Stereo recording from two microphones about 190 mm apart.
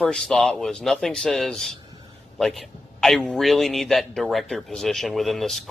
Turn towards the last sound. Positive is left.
turn(degrees=0)  # may be behind; listen again after turning